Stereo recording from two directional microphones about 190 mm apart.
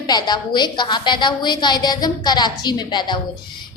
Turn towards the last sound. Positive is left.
turn(degrees=25)  # may be behind; listen again after turning